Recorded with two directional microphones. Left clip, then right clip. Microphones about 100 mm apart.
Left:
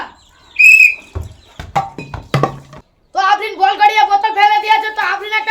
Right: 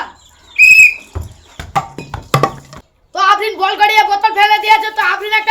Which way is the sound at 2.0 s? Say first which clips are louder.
Even; 45° right (ahead or behind).